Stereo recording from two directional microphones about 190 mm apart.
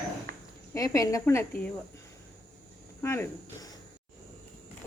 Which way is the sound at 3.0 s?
15° left (ahead or behind).